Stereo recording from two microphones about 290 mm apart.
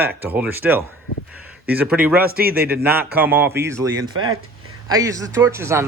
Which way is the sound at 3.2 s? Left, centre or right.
Centre.